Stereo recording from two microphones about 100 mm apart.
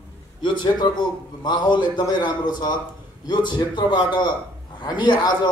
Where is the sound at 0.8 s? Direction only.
50° left (ahead or behind).